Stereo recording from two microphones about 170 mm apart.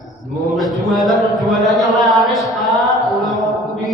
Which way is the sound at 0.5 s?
Centre (ahead or behind).